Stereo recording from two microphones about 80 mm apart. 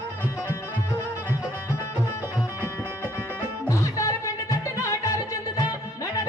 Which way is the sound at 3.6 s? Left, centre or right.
Left.